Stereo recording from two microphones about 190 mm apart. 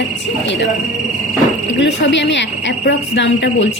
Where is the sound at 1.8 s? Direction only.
70° left (ahead or behind).